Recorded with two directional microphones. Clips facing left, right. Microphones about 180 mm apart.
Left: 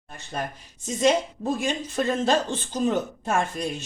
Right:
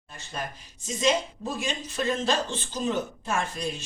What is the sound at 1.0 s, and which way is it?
A woman's voice, 55° left (ahead or behind).